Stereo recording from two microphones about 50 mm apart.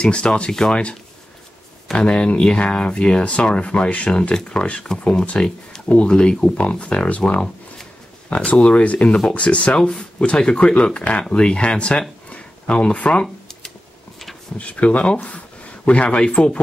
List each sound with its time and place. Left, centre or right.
0.0 s speech: centre
2.0 s speech: left
12.3 s a sound: left
14.6 s speech: left